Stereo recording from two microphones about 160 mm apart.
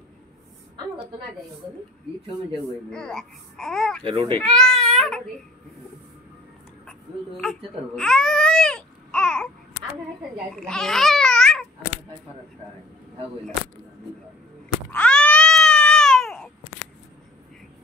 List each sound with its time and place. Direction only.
2.9 s speech: 5° left (ahead or behind)
4.0 s speech: 30° right (ahead or behind)
4.4 s speech: 5° left (ahead or behind)
6.9 s baby cry: 5° left (ahead or behind)
10.5 s a child's voice: 5° left (ahead or behind)
14.9 s a sound: 5° left (ahead or behind)